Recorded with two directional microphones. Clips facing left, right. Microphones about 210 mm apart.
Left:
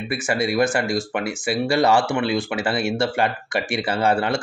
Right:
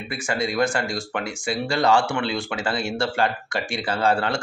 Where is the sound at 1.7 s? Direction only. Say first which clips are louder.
Left 2 dB; 20° left (ahead or behind).